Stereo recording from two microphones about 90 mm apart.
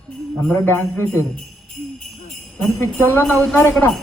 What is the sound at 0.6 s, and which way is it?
Jingle bell, 20° left (ahead or behind).